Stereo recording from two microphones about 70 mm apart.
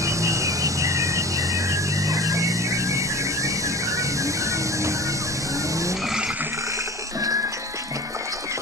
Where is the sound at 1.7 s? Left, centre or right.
Right.